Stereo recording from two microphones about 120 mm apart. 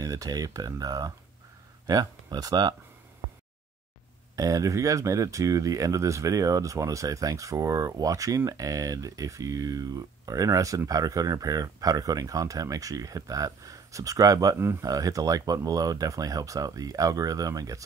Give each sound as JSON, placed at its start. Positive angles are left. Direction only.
{"t": 0.0, "sound": "speech", "side_deg": -30}
{"t": 4.4, "sound": "speech", "side_deg": -30}